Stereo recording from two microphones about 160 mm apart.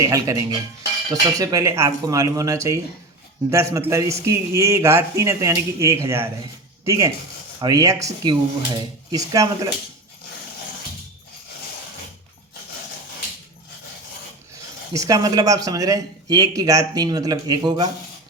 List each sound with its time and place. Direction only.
0.0 s speech: 20° right (ahead or behind)
14.9 s speech: 20° right (ahead or behind)